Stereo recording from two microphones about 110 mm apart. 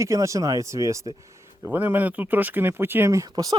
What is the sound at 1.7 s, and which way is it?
Speech, 15° right (ahead or behind).